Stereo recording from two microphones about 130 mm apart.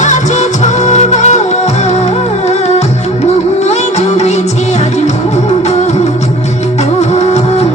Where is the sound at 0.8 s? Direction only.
60° left (ahead or behind).